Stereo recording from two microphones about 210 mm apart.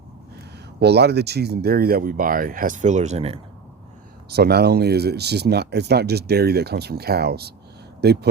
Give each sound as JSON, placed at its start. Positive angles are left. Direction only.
{"t": 0.8, "sound": "speech", "side_deg": -50}
{"t": 4.3, "sound": "speech", "side_deg": -50}